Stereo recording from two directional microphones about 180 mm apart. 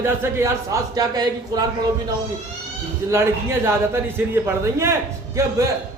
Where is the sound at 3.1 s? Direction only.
15° right (ahead or behind).